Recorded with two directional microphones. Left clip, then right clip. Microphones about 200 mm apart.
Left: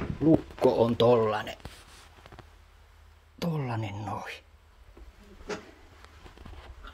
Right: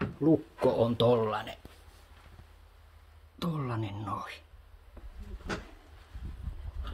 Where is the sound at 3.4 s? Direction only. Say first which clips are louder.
Left 2 dB; 45° left (ahead or behind).